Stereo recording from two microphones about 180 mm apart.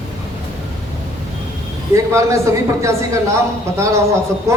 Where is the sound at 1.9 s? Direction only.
15° right (ahead or behind).